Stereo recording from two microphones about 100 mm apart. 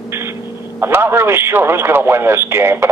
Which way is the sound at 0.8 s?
25° right (ahead or behind).